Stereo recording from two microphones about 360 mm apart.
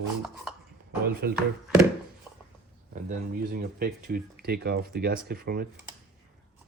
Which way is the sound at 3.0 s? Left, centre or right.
Right.